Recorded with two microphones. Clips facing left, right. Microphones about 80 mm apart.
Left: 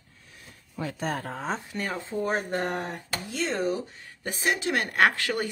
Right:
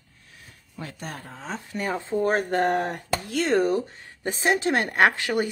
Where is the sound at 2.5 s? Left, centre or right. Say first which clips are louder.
Right 6 dB; right.